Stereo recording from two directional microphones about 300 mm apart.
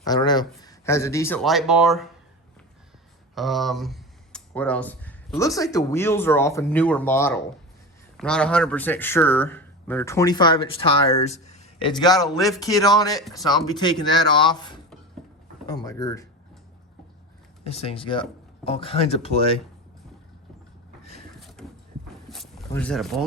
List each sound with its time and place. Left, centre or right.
0.0 s speech: centre
3.3 s speech: centre
17.6 s speech: centre
21.3 s a sound: centre